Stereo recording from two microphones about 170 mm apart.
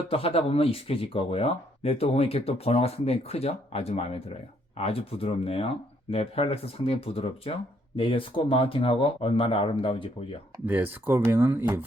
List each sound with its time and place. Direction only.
0.1 s speech: 35° left (ahead or behind)
10.7 s speech: 10° right (ahead or behind)